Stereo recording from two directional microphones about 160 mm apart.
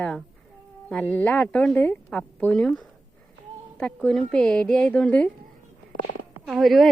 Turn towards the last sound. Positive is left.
turn(degrees=0)  # may be behind; listen again after turning